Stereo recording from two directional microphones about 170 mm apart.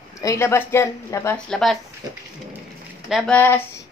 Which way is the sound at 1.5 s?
5° left (ahead or behind).